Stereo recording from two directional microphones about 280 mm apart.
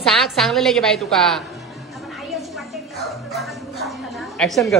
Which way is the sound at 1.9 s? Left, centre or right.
Centre.